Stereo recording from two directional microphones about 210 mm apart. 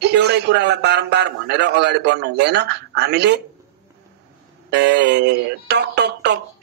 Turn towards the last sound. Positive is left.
turn(degrees=-55)  # may be behind; listen again after turning